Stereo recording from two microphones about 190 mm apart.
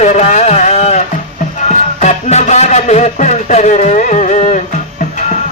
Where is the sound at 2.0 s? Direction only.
35° left (ahead or behind).